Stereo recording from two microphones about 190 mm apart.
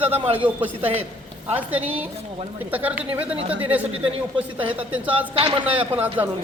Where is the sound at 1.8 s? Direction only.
30° right (ahead or behind).